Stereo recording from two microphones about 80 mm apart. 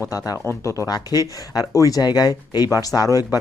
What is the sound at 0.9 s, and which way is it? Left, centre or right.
Speech, left.